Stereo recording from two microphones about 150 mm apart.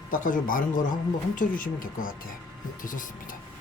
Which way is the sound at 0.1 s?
60° left (ahead or behind).